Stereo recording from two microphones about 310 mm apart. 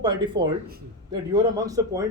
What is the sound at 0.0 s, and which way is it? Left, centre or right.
A man's voice, centre.